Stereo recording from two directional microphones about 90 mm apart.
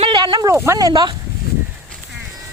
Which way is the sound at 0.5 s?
30° right (ahead or behind).